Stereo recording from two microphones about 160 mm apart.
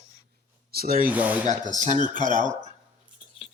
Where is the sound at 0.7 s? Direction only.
65° right (ahead or behind).